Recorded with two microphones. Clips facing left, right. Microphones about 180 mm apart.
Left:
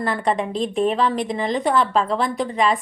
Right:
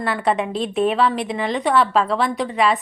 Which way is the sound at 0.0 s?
5° right (ahead or behind).